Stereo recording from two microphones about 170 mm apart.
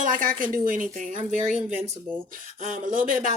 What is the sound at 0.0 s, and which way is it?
Speech, 50° right (ahead or behind).